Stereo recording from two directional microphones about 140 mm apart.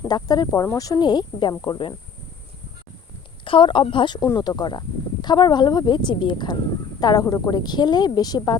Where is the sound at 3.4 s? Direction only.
35° left (ahead or behind).